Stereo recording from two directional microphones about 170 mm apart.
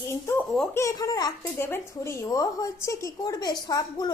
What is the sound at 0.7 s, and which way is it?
A woman's voice, 15° left (ahead or behind).